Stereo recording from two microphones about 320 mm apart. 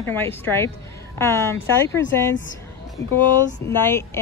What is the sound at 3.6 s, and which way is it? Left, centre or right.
Speech, centre.